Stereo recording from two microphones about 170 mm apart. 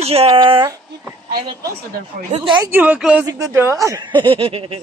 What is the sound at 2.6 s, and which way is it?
Speech, 10° right (ahead or behind).